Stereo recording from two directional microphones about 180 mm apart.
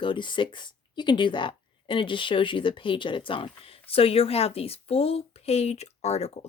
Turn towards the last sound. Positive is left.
turn(degrees=35)  # may be behind; listen again after turning